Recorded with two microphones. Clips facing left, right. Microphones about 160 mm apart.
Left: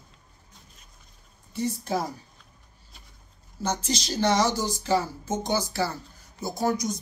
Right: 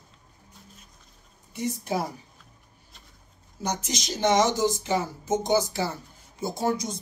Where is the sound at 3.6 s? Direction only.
15° right (ahead or behind).